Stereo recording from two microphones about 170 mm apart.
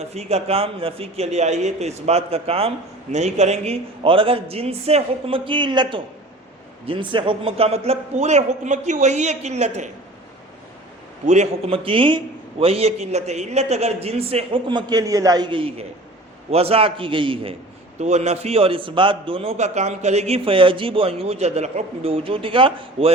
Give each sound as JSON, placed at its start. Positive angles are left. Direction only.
{"t": 0.0, "sound": "a man's voice", "side_deg": -40}
{"t": 11.3, "sound": "a man's voice", "side_deg": -40}